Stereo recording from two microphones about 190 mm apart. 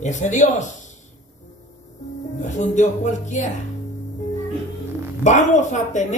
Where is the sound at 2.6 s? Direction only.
40° left (ahead or behind).